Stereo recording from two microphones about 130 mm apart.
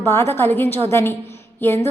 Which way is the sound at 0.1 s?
20° left (ahead or behind).